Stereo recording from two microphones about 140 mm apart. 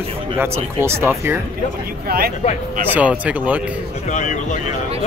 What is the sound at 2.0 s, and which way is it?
Speech, 90° right.